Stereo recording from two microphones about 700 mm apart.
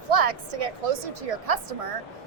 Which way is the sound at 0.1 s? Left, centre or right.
Right.